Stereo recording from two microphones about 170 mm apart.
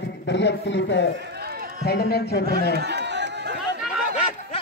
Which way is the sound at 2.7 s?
80° right.